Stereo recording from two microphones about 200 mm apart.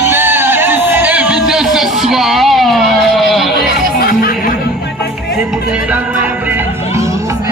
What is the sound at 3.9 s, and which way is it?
Music, 50° left (ahead or behind).